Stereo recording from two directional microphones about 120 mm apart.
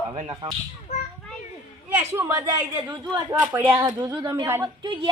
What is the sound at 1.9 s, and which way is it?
Speech, 20° right (ahead or behind).